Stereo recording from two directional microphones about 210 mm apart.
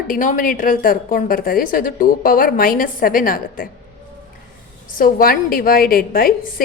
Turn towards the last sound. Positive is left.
turn(degrees=45)  # may be behind; listen again after turning